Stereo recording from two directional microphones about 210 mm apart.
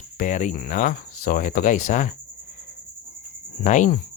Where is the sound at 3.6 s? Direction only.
35° left (ahead or behind).